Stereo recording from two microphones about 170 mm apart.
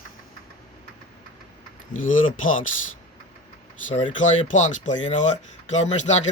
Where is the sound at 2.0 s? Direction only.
50° left (ahead or behind).